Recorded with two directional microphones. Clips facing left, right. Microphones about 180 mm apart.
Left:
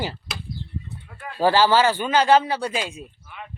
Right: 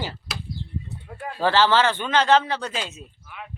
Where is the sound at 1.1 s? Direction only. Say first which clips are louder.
Right 7 dB; 40° right (ahead or behind).